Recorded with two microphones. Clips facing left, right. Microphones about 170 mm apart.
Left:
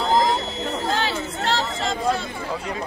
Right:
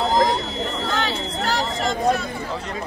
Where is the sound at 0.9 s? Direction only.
30° left (ahead or behind).